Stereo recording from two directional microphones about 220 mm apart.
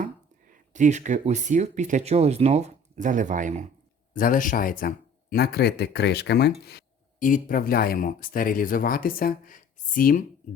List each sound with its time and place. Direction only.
0.5 s speech: 35° right (ahead or behind)
4.1 s speech: 40° left (ahead or behind)